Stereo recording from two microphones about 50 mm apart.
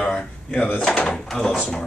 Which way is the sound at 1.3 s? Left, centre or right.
Centre.